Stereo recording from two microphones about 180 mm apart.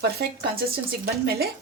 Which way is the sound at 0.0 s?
60° right (ahead or behind).